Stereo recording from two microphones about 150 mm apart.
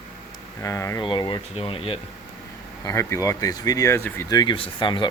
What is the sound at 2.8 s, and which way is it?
Speech, 20° left (ahead or behind).